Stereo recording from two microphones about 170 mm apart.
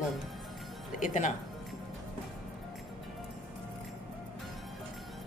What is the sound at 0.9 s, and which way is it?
Speech, 50° left (ahead or behind).